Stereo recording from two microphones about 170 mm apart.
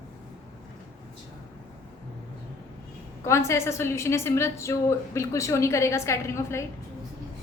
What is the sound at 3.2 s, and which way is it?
A woman's voice, 15° left (ahead or behind).